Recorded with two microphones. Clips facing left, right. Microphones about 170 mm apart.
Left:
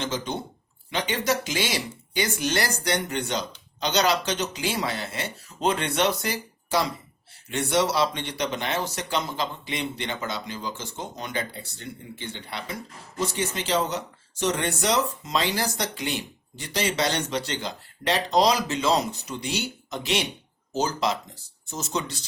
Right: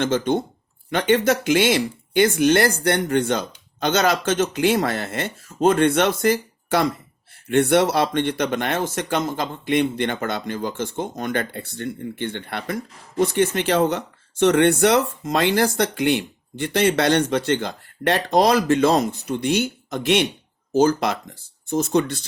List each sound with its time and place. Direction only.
0.0 s speech: 55° right (ahead or behind)